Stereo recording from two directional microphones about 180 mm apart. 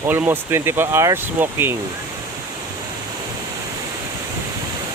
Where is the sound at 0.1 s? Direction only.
10° right (ahead or behind).